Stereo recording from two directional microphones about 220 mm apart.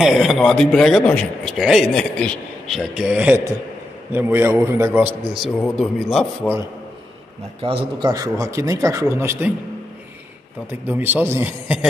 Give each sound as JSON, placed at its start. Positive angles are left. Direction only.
{"t": 0.0, "sound": "a man's voice", "side_deg": 0}
{"t": 5.4, "sound": "a man's voice", "side_deg": 0}
{"t": 7.6, "sound": "speech", "side_deg": -20}
{"t": 10.7, "sound": "speech", "side_deg": -10}